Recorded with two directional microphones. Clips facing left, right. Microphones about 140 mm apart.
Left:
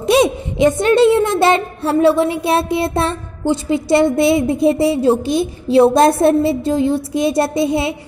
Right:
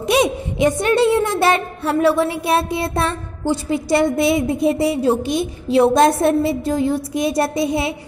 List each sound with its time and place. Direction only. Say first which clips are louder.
0.0 s a woman's voice: left 3 dB; 30° left (ahead or behind)